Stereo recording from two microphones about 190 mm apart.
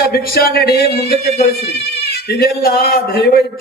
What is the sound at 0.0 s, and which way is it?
Speech, 55° left (ahead or behind).